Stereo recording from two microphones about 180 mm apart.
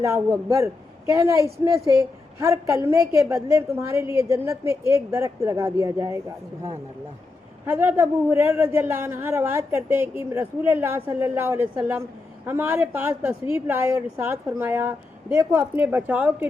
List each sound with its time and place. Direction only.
0.0 s a man's voice: 15° right (ahead or behind)